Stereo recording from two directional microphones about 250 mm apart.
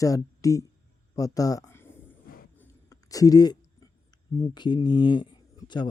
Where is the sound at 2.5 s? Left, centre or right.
Centre.